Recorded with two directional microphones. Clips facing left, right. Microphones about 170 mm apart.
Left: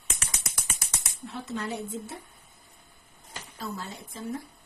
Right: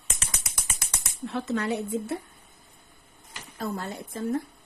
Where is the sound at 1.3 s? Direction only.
70° right (ahead or behind).